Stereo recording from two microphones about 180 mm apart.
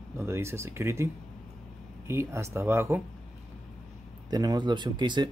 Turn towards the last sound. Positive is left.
turn(degrees=-25)  # may be behind; listen again after turning